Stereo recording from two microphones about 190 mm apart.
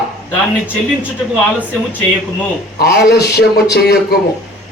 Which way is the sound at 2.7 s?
60° left (ahead or behind).